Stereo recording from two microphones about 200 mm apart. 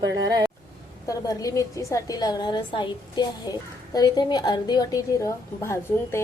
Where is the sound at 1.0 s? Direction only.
15° left (ahead or behind).